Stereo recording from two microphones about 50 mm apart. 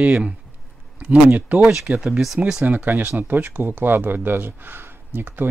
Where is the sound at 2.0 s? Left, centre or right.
Centre.